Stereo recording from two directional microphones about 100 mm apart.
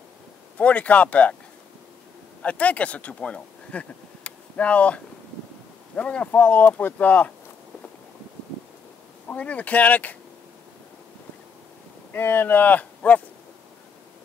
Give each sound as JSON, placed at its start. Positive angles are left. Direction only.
{"t": 0.6, "sound": "speech", "side_deg": 15}
{"t": 2.4, "sound": "speech", "side_deg": 15}
{"t": 9.3, "sound": "speech", "side_deg": 15}
{"t": 12.1, "sound": "speech", "side_deg": 20}